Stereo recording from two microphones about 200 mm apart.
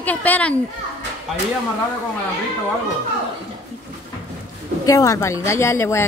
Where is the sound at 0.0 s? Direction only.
10° left (ahead or behind).